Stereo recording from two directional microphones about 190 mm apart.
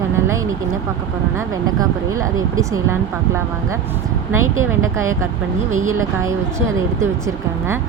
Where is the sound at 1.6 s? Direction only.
20° right (ahead or behind).